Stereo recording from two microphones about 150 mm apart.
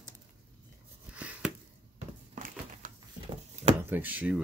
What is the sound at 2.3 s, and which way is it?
Crumpling, 65° right (ahead or behind).